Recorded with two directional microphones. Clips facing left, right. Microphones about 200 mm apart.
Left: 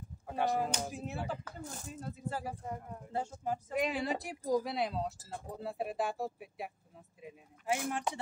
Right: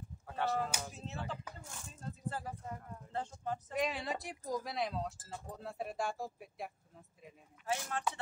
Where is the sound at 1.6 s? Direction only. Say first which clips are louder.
Left 8 dB; 40° left (ahead or behind).